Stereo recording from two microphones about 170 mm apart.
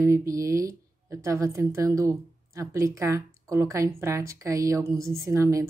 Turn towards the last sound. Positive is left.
turn(degrees=-20)  # may be behind; listen again after turning